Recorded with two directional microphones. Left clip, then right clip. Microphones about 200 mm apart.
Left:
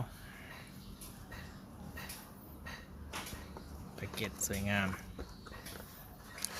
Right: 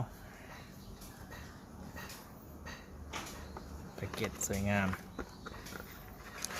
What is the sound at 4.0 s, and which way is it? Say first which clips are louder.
Speech: right 2 dB; 10° right (ahead or behind).